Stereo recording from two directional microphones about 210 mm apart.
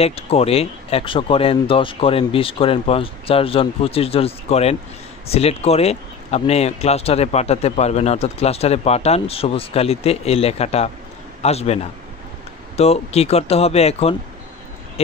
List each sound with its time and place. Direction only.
0.0 s a man's voice: 30° left (ahead or behind)